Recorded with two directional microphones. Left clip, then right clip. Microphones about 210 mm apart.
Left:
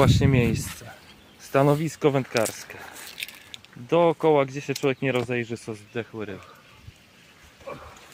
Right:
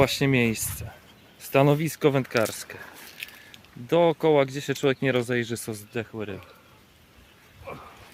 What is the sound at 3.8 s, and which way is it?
Speech, centre (ahead or behind).